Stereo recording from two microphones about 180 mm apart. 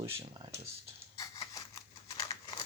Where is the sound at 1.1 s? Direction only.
20° left (ahead or behind).